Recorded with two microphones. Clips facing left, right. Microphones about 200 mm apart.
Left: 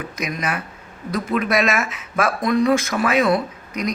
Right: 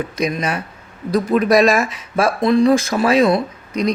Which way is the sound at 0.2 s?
30° right (ahead or behind).